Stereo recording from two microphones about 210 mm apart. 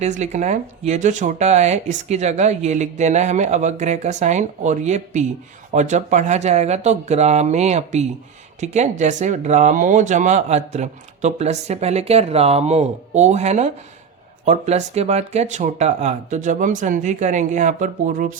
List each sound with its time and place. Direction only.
0.0 s speech: 35° right (ahead or behind)